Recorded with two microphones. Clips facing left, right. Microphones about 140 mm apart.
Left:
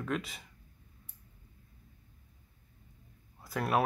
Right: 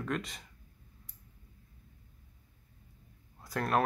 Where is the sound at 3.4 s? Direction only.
5° left (ahead or behind).